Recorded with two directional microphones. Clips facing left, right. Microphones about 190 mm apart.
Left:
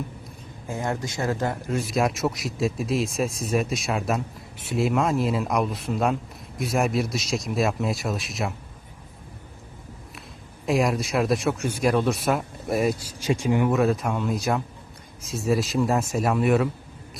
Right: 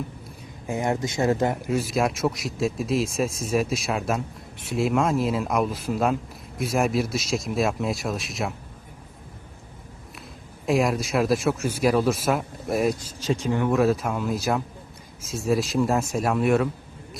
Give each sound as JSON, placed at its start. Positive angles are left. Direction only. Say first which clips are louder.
{"t": 0.7, "sound": "speech", "louder": "right 3 dB", "side_deg": -20}
{"t": 1.7, "sound": "speech", "louder": "right 1 dB", "side_deg": 0}
{"t": 10.7, "sound": "speech", "louder": "right 1 dB", "side_deg": 0}
{"t": 13.7, "sound": "speech", "louder": "right 1 dB", "side_deg": 0}